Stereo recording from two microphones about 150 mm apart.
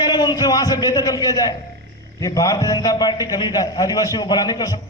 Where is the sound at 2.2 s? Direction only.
20° left (ahead or behind).